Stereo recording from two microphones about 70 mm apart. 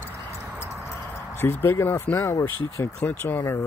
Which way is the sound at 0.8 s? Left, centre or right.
Left.